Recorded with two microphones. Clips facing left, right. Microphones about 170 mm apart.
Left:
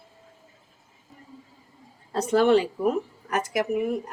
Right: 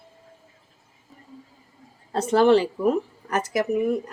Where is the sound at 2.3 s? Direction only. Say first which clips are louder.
Right 2 dB; 30° right (ahead or behind).